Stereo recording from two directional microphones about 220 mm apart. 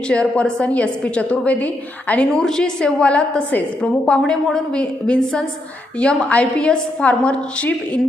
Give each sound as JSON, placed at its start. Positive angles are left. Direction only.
{"t": 0.1, "sound": "a woman's voice", "side_deg": 5}